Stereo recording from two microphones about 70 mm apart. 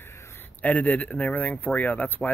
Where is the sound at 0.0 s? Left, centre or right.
Left.